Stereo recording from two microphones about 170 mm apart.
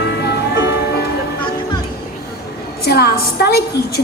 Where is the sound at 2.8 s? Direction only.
65° left (ahead or behind).